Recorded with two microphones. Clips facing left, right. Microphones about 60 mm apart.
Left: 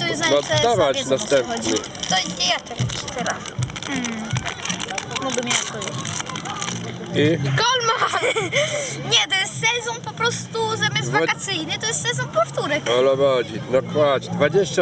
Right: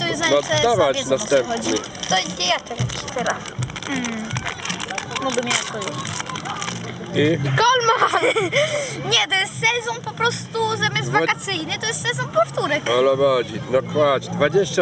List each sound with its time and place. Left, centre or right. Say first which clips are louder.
0.0 s speech: right 1 dB; centre
2.0 s speech: right 2 dB; right
3.8 s speech: right 1 dB; centre
5.2 s speech: right 2 dB; centre
7.1 s speech: even; centre